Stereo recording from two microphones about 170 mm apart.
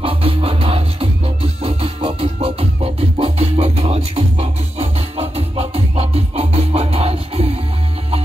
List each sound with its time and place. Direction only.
0.0 s music: 35° right (ahead or behind)